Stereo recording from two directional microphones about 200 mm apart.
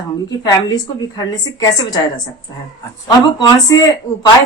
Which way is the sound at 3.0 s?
20° left (ahead or behind).